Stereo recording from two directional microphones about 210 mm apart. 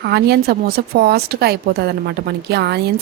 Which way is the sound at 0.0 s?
50° right (ahead or behind).